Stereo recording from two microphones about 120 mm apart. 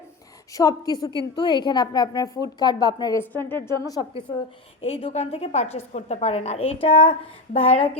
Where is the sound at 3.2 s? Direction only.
15° left (ahead or behind).